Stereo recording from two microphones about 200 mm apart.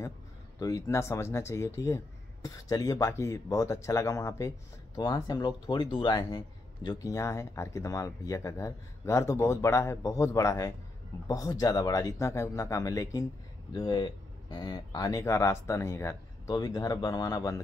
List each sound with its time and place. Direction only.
0.6 s speech: 15° left (ahead or behind)
14.5 s speech: 20° left (ahead or behind)